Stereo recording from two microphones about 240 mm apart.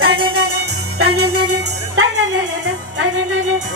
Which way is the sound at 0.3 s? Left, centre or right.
Right.